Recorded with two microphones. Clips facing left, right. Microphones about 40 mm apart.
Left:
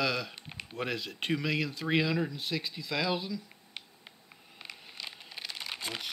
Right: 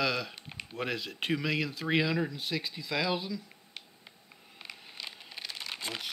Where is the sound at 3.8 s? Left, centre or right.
Centre.